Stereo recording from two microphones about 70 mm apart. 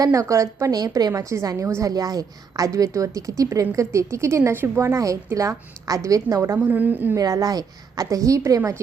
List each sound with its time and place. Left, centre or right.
0.0 s a woman's voice: right
0.8 s a woman's voice: right
1.1 s a woman's voice: right
1.9 s a woman's voice: right
4.9 s a woman's voice: right
6.6 s a woman's voice: right
7.2 s a woman's voice: right